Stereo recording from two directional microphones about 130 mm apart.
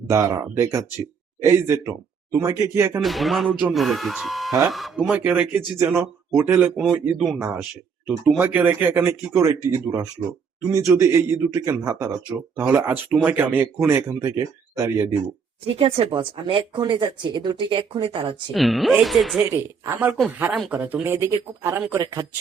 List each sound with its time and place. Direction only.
0.1 s speech: 25° right (ahead or behind)
3.0 s speech: centre (ahead or behind); by 7.6 s 20° right (ahead or behind)
7.6 s speech: 5° right (ahead or behind); by 15.1 s 25° right (ahead or behind)
15.6 s speech: 45° right (ahead or behind)
18.5 s speech: centre (ahead or behind)
19.5 s speech: 20° right (ahead or behind)